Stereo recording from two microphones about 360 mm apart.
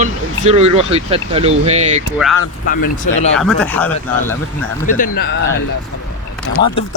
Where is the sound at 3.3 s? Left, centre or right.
Centre.